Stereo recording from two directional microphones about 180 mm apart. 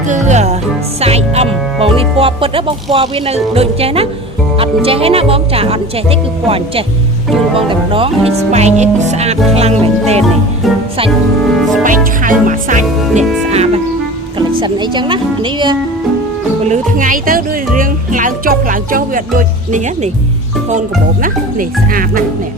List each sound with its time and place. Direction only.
0.1 s music: 40° right (ahead or behind)
1.0 s speech: 35° right (ahead or behind)
11.8 s speech: 45° right (ahead or behind)
14.6 s a woman's voice: 25° right (ahead or behind)
16.6 s speech: 50° right (ahead or behind)